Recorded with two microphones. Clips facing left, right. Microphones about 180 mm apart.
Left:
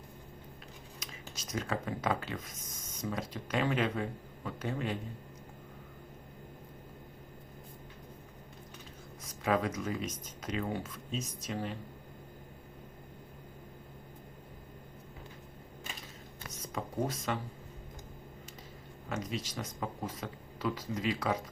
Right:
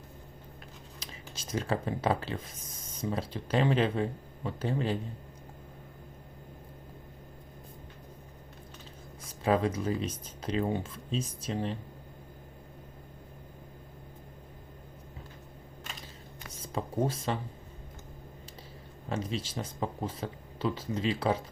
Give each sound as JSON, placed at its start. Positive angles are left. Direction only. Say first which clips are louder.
{"t": 0.9, "sound": "speech", "louder": "right 1 dB", "side_deg": -30}
{"t": 9.2, "sound": "speech", "louder": "right 4 dB", "side_deg": -30}
{"t": 16.5, "sound": "speech", "louder": "right 4 dB", "side_deg": -30}
{"t": 19.0, "sound": "speech", "louder": "right 3 dB", "side_deg": -30}